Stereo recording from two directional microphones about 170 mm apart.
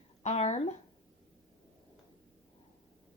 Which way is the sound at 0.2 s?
40° left (ahead or behind).